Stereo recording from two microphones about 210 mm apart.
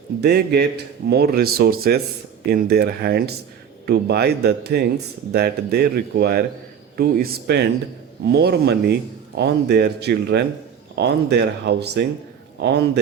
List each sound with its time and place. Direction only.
0.2 s a man's voice: 50° right (ahead or behind)